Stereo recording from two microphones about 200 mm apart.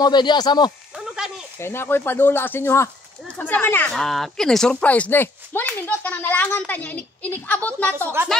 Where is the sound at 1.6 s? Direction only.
10° left (ahead or behind).